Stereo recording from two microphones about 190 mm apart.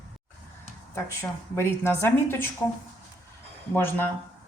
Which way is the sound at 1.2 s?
15° left (ahead or behind).